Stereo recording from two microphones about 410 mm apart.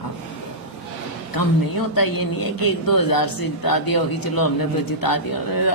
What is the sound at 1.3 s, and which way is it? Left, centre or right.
Speech, left.